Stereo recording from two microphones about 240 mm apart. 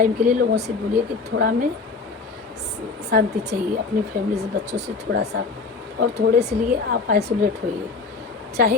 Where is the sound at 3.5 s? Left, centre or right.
Right.